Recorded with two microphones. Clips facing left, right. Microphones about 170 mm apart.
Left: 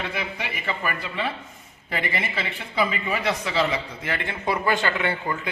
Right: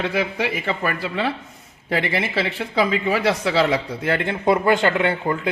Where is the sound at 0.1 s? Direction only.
90° right; by 4.5 s 60° right (ahead or behind).